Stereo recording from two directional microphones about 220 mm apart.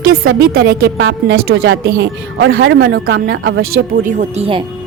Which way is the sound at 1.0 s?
60° right (ahead or behind).